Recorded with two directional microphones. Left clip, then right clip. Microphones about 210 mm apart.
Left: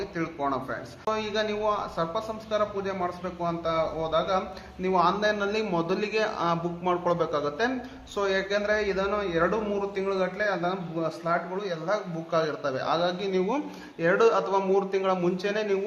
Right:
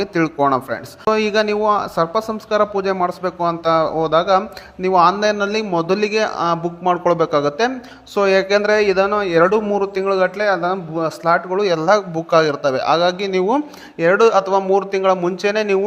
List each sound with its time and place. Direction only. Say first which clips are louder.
0.0 s speech: right 13 dB; 45° right (ahead or behind)